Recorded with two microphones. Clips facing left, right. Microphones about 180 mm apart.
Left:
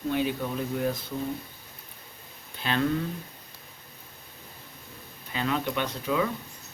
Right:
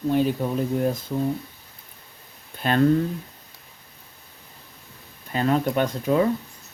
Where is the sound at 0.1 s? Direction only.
40° right (ahead or behind).